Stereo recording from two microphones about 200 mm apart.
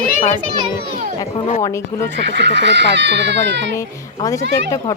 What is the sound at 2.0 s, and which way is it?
Speech, 60° right (ahead or behind).